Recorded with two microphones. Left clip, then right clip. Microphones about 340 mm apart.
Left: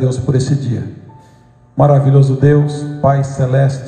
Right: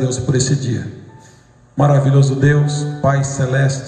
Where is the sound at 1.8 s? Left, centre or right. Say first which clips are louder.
Left 4 dB; centre.